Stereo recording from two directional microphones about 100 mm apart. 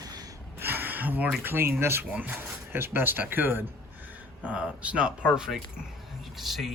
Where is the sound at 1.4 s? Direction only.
25° right (ahead or behind); by 6.7 s centre (ahead or behind).